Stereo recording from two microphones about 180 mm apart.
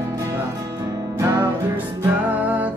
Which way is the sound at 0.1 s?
15° right (ahead or behind).